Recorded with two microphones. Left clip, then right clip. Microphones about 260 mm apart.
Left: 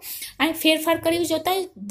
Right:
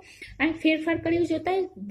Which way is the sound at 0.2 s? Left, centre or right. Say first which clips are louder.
Left 3 dB; centre.